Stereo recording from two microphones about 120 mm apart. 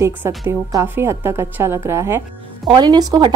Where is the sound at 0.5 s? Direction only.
25° right (ahead or behind).